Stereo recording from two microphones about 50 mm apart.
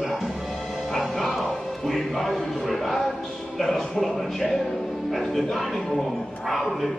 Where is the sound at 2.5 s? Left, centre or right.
Centre.